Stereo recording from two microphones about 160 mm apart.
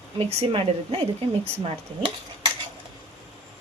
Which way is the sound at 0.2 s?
40° right (ahead or behind).